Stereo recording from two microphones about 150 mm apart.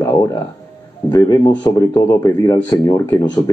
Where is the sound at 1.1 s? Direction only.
25° left (ahead or behind).